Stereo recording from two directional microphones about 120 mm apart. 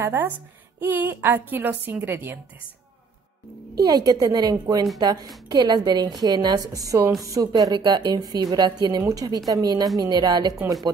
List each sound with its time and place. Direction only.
0.0 s a woman's voice: 20° right (ahead or behind)
3.8 s a woman's voice: 35° right (ahead or behind)